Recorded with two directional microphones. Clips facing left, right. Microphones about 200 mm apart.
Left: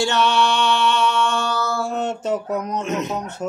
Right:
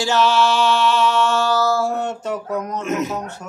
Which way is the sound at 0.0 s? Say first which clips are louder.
Right 2 dB; centre (ahead or behind).